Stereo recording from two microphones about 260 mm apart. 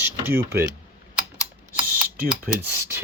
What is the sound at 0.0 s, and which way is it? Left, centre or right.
Mechanisms, centre.